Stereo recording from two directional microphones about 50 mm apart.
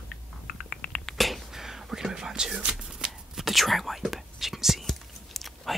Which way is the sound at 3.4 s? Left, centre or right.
Centre.